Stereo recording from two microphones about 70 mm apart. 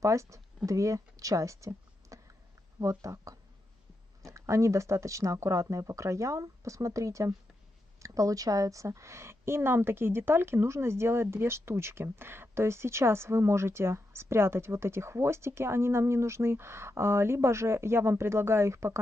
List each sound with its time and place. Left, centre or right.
0.0 s a woman's voice: right